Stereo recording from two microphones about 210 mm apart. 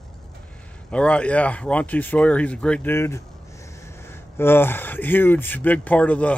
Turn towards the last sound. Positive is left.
turn(degrees=5)  # may be behind; listen again after turning